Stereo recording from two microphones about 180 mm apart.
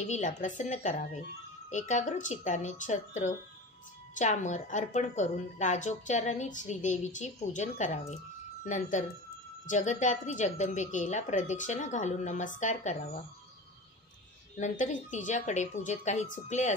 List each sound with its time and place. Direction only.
0.0 s a woman's voice: 40° left (ahead or behind)
9.7 s a woman's voice: 45° left (ahead or behind)
14.6 s a woman's voice: 45° left (ahead or behind)